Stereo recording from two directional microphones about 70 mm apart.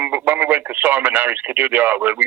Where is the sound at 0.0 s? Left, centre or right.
Right.